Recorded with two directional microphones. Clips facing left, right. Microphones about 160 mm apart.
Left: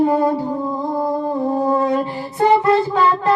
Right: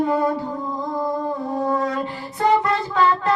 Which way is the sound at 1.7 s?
30° left (ahead or behind).